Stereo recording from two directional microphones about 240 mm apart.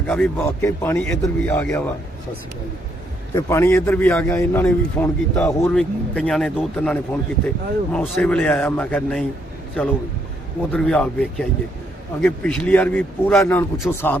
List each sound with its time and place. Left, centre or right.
0.1 s a man's voice: centre
3.3 s a man's voice: centre
10.7 s a man's voice: centre